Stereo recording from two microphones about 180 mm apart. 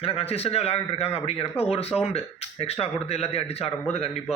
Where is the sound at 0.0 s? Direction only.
30° left (ahead or behind).